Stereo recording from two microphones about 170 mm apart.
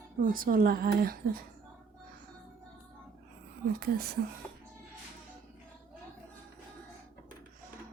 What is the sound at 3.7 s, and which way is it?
Speech, 65° right (ahead or behind).